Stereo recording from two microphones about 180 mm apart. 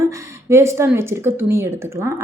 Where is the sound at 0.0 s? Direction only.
15° right (ahead or behind).